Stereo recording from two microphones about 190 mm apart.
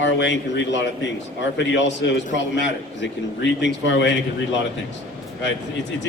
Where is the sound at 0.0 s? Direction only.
70° left (ahead or behind).